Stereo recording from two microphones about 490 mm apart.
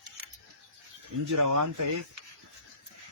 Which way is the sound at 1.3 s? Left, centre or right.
Right.